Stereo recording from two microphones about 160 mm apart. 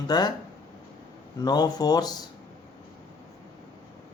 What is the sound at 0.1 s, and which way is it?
Speech, 25° left (ahead or behind).